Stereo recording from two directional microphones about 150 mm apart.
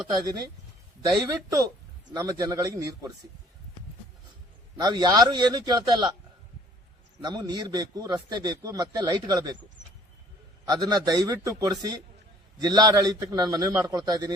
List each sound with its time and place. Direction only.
1.1 s a man's voice: 25° right (ahead or behind)
4.8 s a man's voice: 30° right (ahead or behind)
7.2 s a man's voice: 25° right (ahead or behind)
10.7 s a man's voice: 25° right (ahead or behind)